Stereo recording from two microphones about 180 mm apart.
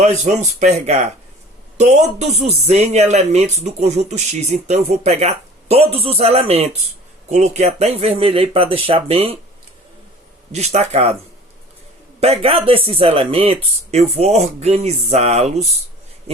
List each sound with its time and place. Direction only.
0.0 s speech: 40° right (ahead or behind)
10.5 s speech: 35° right (ahead or behind)
12.2 s speech: 35° right (ahead or behind)